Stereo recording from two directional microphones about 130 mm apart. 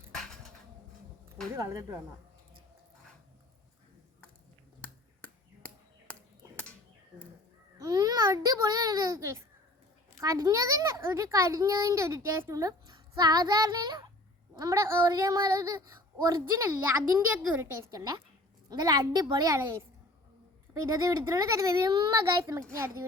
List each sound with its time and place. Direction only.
0.1 s a sound: 5° left (ahead or behind)
1.5 s a woman's voice: 25° right (ahead or behind)
4.8 s finger snapping: 10° left (ahead or behind)
7.8 s a child's voice: 30° right (ahead or behind)
17.3 s a woman's voice: 15° right (ahead or behind)
17.9 s a woman's voice: 30° right (ahead or behind)
19.5 s a woman's voice: 20° right (ahead or behind)
20.8 s a woman's voice: 25° right (ahead or behind)